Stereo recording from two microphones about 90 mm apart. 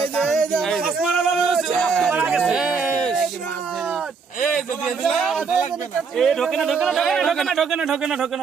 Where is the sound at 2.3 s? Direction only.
5° right (ahead or behind).